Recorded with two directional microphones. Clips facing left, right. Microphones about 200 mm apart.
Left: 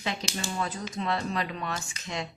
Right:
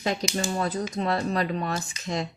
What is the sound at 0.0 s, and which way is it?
Speech, 40° right (ahead or behind).